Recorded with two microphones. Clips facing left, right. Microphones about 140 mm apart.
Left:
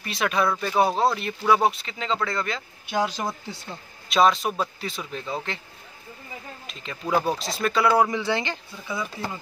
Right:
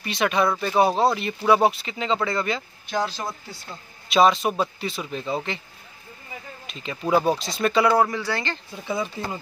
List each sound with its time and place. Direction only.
0.0 s speech: centre (ahead or behind)
2.9 s speech: 15° left (ahead or behind)
4.1 s speech: centre (ahead or behind)
6.7 s speech: centre (ahead or behind)
7.9 s speech: 15° left (ahead or behind)
8.8 s speech: 25° right (ahead or behind)